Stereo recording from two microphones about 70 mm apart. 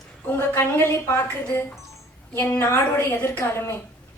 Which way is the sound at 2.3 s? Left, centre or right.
Left.